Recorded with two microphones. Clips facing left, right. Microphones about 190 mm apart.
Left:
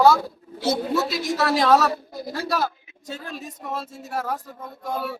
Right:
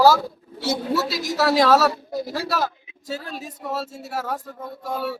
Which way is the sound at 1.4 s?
5° right (ahead or behind).